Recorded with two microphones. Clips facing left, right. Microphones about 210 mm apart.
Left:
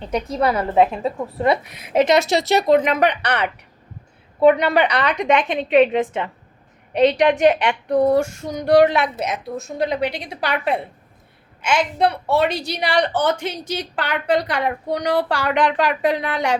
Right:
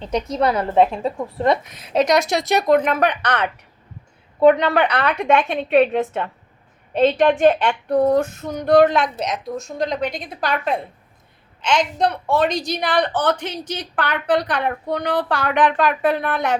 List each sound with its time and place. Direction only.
0.1 s a woman's voice: 5° left (ahead or behind)
2.8 s a woman's voice: 15° left (ahead or behind)
6.9 s a woman's voice: 15° left (ahead or behind)
10.0 s a woman's voice: 75° left (ahead or behind)
11.6 s a woman's voice: 10° left (ahead or behind)